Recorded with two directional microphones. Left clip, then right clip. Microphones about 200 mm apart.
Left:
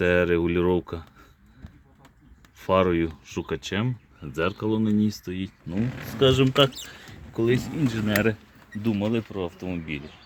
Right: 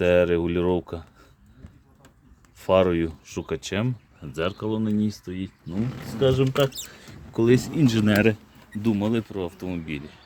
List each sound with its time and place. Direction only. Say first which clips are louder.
0.0 s speech: right 2 dB; centre (ahead or behind)
2.6 s speech: right 2 dB; centre (ahead or behind)
7.3 s speech: right 4 dB; 30° right (ahead or behind)
8.1 s speech: right 1 dB; 15° right (ahead or behind)
8.8 s speech: right 1 dB; 5° right (ahead or behind)